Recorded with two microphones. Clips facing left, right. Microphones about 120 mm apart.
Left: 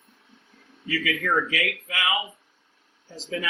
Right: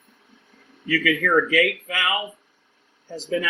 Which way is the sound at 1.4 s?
60° right (ahead or behind).